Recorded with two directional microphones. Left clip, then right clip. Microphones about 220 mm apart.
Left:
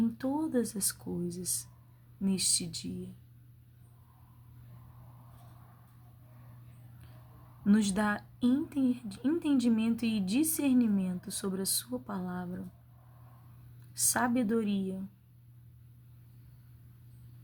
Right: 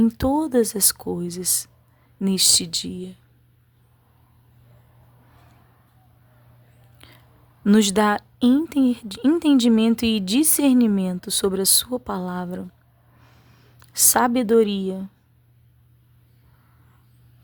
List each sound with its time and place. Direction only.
0.2 s speech: 45° right (ahead or behind)
7.6 s speech: 45° right (ahead or behind)
13.7 s speech: 45° right (ahead or behind)